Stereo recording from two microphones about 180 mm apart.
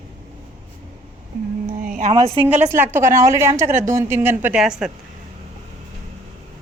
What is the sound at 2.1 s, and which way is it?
Speech, 25° right (ahead or behind).